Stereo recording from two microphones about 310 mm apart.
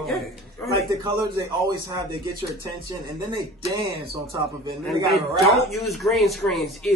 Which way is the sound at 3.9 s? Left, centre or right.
Right.